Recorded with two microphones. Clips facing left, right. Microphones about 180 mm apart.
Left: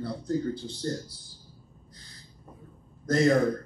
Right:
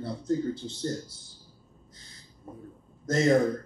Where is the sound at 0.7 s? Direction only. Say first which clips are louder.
Even; 25° right (ahead or behind).